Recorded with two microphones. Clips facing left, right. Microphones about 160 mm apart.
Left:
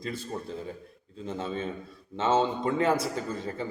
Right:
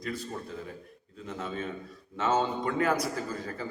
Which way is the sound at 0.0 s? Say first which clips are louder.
Left 1 dB; 25° left (ahead or behind).